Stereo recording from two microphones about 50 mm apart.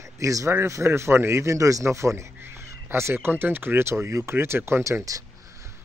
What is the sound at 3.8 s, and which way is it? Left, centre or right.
Speech, right.